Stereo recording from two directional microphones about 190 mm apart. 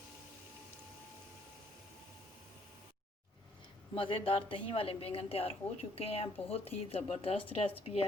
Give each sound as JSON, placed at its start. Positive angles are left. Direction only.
{"t": 3.9, "sound": "a woman's voice", "side_deg": 30}